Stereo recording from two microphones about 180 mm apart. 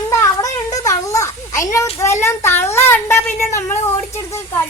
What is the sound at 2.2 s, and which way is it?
A woman's voice, 15° left (ahead or behind).